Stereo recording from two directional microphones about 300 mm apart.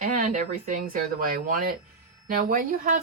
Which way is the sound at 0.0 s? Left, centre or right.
Right.